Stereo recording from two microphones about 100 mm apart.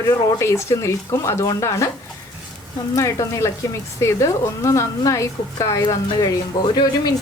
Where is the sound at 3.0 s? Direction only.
30° left (ahead or behind).